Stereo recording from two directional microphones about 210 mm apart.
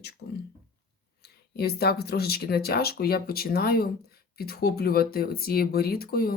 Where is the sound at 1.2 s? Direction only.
50° left (ahead or behind).